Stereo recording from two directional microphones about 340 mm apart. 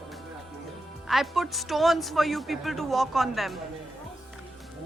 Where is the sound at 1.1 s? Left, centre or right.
Centre.